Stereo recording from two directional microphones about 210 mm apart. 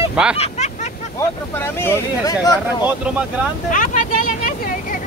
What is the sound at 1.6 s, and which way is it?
Speech, 10° left (ahead or behind).